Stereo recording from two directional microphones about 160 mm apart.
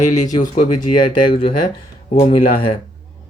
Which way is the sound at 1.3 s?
35° left (ahead or behind).